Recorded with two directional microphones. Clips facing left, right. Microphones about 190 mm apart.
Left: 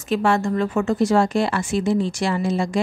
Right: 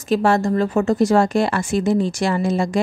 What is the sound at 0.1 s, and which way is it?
A woman's voice, 40° right (ahead or behind).